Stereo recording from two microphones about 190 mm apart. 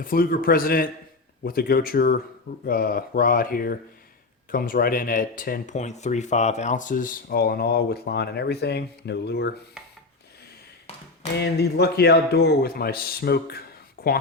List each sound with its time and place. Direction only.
0.0 s speech: 50° left (ahead or behind)
11.3 s a man's voice: 60° left (ahead or behind)
14.0 s a sound: 50° left (ahead or behind)